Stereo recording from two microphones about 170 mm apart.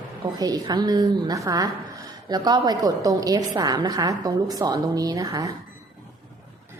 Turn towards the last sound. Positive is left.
turn(degrees=-20)  # may be behind; listen again after turning